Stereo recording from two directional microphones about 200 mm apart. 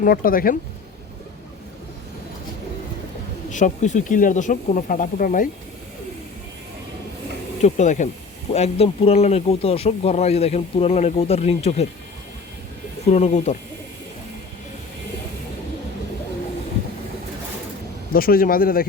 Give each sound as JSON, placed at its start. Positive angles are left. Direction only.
{"t": 0.0, "sound": "speech", "side_deg": 45}
{"t": 3.5, "sound": "speech", "side_deg": 40}
{"t": 7.6, "sound": "speech", "side_deg": 35}
{"t": 13.1, "sound": "speech", "side_deg": 35}
{"t": 18.1, "sound": "speech", "side_deg": 45}